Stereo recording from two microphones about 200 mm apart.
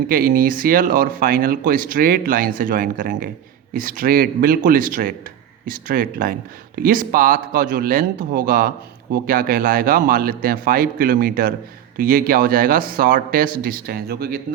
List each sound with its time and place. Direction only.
0.1 s speech: 45° right (ahead or behind)